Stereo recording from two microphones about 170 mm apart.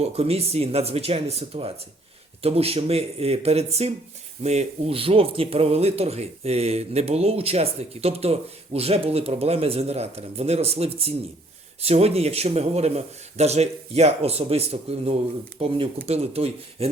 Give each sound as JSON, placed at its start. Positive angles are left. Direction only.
{"t": 0.0, "sound": "speech", "side_deg": -35}